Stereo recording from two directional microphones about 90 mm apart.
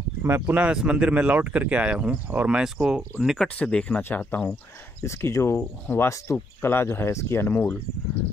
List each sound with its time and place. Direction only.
0.5 s speech: 15° right (ahead or behind)
3.3 s speech: 10° left (ahead or behind)
5.0 s speech: 30° left (ahead or behind)